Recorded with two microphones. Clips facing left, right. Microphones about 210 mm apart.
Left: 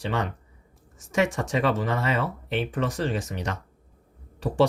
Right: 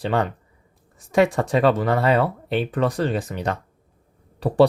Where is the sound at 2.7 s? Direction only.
60° right (ahead or behind).